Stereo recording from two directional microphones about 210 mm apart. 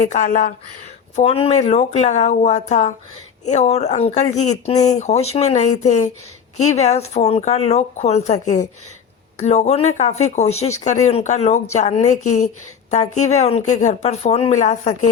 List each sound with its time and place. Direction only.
0.0 s speech: 40° left (ahead or behind)
1.1 s speech: 30° left (ahead or behind)